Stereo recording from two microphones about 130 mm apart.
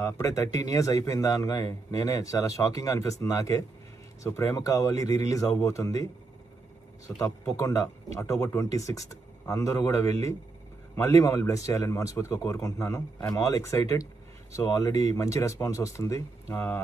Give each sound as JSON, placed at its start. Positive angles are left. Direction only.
{"t": 0.0, "sound": "speech", "side_deg": 25}
{"t": 7.2, "sound": "speech", "side_deg": 25}